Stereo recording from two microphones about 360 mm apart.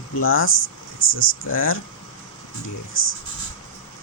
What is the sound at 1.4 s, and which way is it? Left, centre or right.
Speech, left.